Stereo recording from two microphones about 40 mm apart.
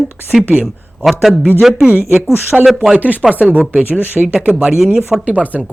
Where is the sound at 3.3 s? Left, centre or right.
Right.